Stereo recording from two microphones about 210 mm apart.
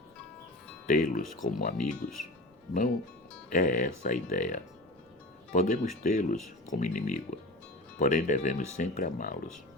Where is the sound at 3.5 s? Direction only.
40° left (ahead or behind).